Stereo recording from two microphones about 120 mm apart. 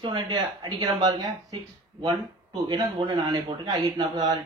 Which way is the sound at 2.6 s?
40° right (ahead or behind).